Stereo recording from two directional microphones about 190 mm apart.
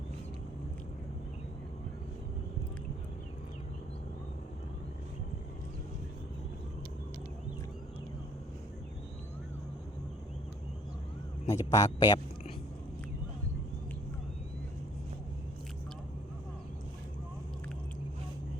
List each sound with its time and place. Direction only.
11.4 s speech: 15° left (ahead or behind)